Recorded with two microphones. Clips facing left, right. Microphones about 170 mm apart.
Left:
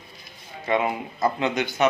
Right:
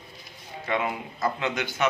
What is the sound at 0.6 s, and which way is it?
Speech, 25° left (ahead or behind).